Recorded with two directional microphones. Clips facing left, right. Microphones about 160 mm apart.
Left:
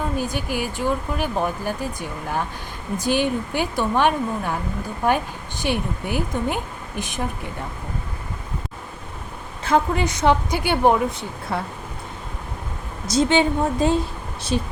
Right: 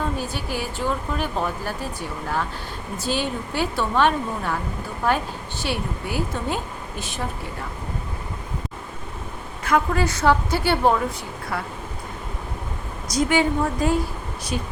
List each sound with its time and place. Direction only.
0.2 s speech: 15° left (ahead or behind)
9.6 s a woman's voice: 25° left (ahead or behind)
13.1 s speech: 25° left (ahead or behind)